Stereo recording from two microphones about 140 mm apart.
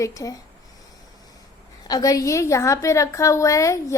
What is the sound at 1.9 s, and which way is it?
A woman's voice, 25° left (ahead or behind).